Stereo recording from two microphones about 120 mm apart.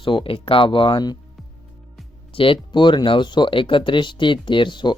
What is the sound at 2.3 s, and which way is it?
Speech, 45° left (ahead or behind).